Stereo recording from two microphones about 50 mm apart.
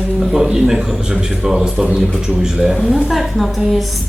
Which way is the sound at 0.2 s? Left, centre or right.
Centre.